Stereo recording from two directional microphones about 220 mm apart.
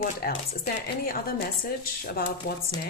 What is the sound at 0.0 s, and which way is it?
Speech, 40° left (ahead or behind).